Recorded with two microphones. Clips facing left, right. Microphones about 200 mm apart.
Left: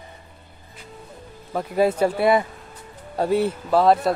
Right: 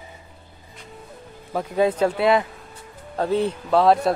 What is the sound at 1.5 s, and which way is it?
Speech, 10° left (ahead or behind).